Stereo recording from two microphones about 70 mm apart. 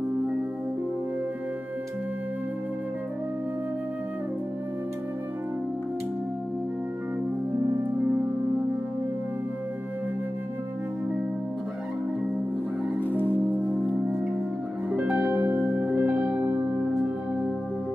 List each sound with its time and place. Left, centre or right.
8.0 s music: right
13.0 s music: left
13.7 s music: centre
16.6 s music: centre